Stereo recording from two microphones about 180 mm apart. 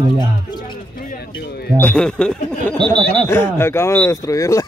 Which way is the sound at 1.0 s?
55° left (ahead or behind).